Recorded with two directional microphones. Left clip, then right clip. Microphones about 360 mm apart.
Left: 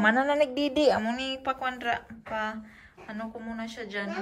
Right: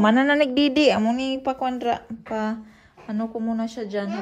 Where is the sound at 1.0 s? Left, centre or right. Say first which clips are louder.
Right 6 dB; centre.